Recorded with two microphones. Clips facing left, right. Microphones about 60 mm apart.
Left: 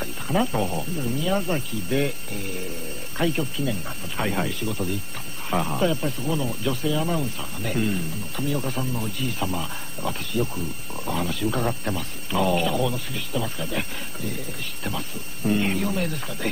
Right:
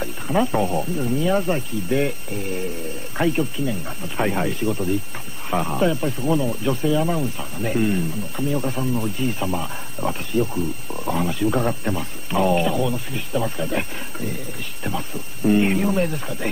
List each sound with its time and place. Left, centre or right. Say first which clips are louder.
0.0 s a sound: right 3 dB; centre
0.7 s speech: right 5 dB; right
3.2 s speech: right 3 dB; right
4.5 s speech: right 6 dB; right
5.5 s speech: right 3 dB; centre